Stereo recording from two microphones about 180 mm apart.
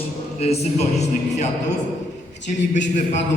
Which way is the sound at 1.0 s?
40° left (ahead or behind).